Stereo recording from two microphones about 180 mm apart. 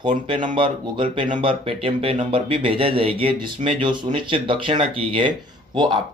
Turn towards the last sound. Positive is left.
turn(degrees=-25)  # may be behind; listen again after turning